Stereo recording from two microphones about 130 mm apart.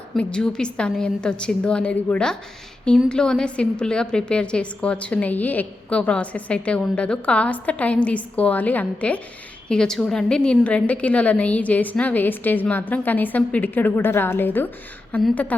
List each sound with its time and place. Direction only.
0.2 s a woman's voice: 5° left (ahead or behind)